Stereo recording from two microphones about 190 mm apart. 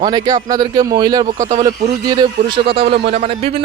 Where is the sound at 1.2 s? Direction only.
40° right (ahead or behind).